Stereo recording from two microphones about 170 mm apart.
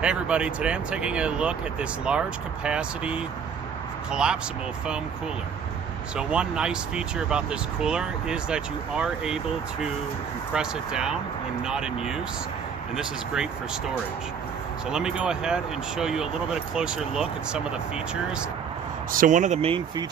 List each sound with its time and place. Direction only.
0.0 s speech: 5° right (ahead or behind)
6.1 s speech: 5° right (ahead or behind)
10.5 s speech: 5° right (ahead or behind)
19.1 s speech: 50° right (ahead or behind)